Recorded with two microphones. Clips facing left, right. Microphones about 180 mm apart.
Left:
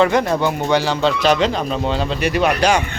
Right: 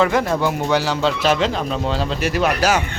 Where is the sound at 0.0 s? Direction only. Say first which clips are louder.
Left 2 dB; centre (ahead or behind).